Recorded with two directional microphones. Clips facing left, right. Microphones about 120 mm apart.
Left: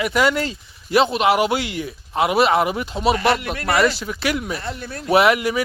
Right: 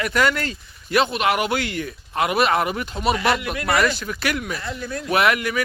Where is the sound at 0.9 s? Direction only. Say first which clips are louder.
Left 3 dB; 25° left (ahead or behind).